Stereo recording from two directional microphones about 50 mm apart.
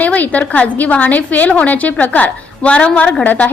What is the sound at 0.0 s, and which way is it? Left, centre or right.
A woman's voice, left.